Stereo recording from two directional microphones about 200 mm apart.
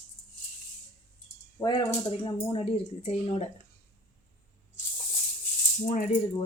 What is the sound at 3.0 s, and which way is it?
Speech, 30° left (ahead or behind).